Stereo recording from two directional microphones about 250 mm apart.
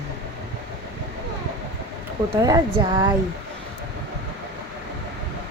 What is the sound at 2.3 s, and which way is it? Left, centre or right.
Speech, centre.